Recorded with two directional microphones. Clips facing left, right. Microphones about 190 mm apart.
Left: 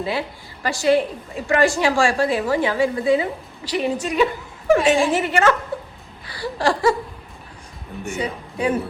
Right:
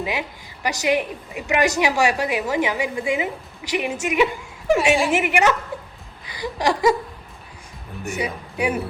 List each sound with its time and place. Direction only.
0.0 s a woman's voice: 15° right (ahead or behind)
6.2 s a sound: 15° right (ahead or behind)
8.2 s a man's voice: 15° right (ahead or behind)